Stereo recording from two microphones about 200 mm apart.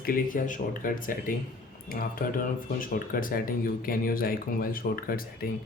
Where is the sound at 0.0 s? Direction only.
45° left (ahead or behind).